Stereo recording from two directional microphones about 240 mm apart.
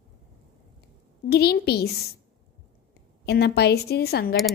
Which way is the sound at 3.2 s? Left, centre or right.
Left.